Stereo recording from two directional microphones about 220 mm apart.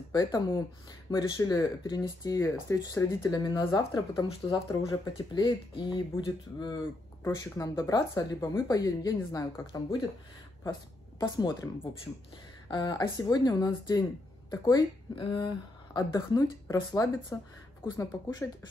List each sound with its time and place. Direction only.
0.1 s speech: 20° left (ahead or behind)